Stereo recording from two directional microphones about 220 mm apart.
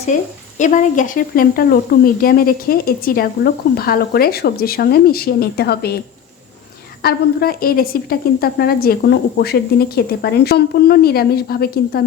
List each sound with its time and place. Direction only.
0.1 s a woman's voice: 35° left (ahead or behind)
7.0 s speech: 45° left (ahead or behind)